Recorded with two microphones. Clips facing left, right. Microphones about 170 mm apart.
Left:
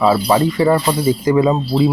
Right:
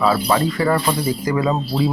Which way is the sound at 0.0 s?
20° left (ahead or behind).